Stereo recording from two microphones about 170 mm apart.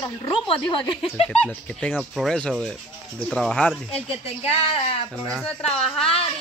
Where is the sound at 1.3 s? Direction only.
5° left (ahead or behind).